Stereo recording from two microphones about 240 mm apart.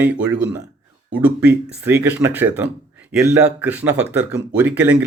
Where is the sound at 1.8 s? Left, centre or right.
Centre.